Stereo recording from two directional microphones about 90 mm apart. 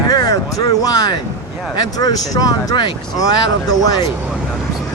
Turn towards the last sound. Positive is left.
turn(degrees=45)  # may be behind; listen again after turning